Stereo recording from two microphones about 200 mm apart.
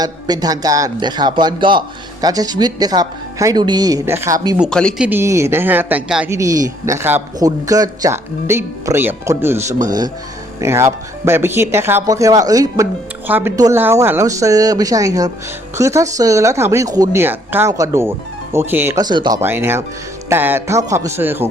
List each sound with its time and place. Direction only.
0.0 s speech: 20° right (ahead or behind)
4.5 s speech: centre (ahead or behind)
5.0 s speech: 10° right (ahead or behind)
19.4 s speech: 10° right (ahead or behind)